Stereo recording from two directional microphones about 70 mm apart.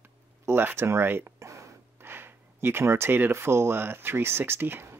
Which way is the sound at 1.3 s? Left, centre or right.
Right.